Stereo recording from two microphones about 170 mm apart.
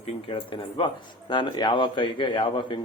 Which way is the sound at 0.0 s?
30° left (ahead or behind).